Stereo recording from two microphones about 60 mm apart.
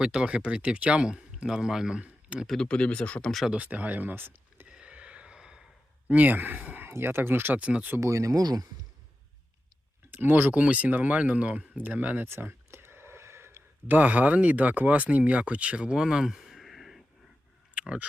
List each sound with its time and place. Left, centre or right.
0.0 s speech: centre
2.6 s speech: centre
3.2 s speech: centre
3.5 s speech: right
4.7 s a sound: centre
6.1 s speech: right
7.6 s speech: right
8.0 s speech: right
10.1 s speech: right
12.3 s a sound: right
13.8 s speech: right; by 17.0 s centre
17.7 s tick-tock: centre